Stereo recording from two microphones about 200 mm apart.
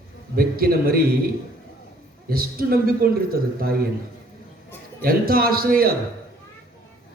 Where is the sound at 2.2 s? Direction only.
50° right (ahead or behind).